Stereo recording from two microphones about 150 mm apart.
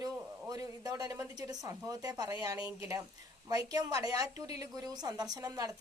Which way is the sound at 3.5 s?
25° right (ahead or behind).